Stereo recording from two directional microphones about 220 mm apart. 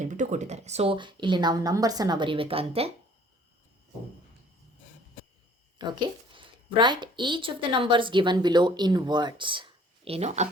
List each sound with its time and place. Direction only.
0.0 s a woman's voice: 35° right (ahead or behind)
5.8 s a woman's voice: 20° right (ahead or behind)